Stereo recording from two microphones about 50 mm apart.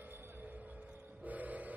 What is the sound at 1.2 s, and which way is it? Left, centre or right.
Vehicle, right.